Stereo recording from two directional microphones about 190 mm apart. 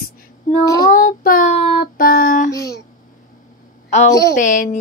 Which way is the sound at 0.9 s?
45° left (ahead or behind).